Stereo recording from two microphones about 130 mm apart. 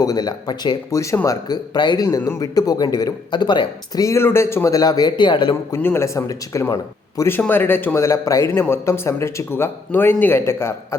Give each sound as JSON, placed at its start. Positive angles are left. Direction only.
{"t": 0.0, "sound": "speech", "side_deg": 30}
{"t": 5.7, "sound": "speech", "side_deg": 20}